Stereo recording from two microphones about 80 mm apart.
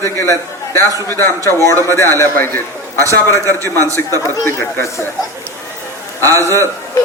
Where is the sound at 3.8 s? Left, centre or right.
Right.